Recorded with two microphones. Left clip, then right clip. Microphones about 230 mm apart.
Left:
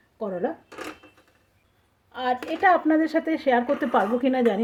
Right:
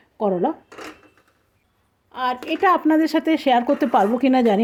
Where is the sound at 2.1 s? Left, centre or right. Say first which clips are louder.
Right 3 dB; right.